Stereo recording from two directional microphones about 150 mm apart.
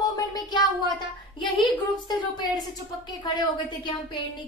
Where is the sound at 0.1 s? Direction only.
30° left (ahead or behind).